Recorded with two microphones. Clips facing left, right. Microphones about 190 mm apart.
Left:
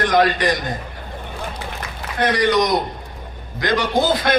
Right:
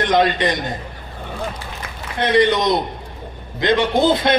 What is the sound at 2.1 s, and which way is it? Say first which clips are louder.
A man's voice: right 1 dB; 25° right (ahead or behind).